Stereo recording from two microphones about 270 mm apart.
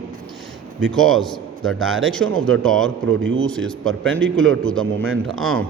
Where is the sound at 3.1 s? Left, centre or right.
Right.